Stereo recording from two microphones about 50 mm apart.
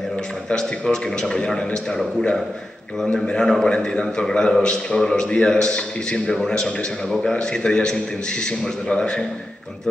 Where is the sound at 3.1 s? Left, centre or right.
Centre.